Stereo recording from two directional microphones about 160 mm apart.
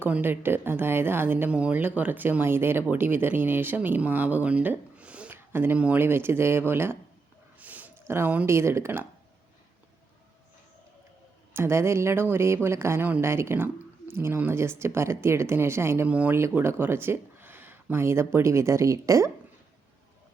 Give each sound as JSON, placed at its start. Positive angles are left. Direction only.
{"t": 0.0, "sound": "speech", "side_deg": -10}
{"t": 11.5, "sound": "speech", "side_deg": -15}